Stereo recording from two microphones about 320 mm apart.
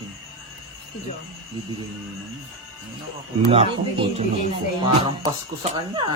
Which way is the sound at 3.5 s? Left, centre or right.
Centre.